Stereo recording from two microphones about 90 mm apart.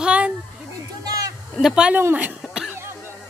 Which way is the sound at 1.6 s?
10° right (ahead or behind).